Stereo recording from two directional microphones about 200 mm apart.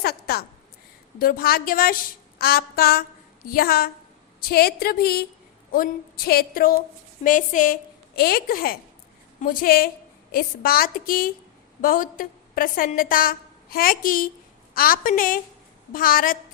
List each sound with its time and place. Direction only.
0.0 s a woman's voice: 50° left (ahead or behind)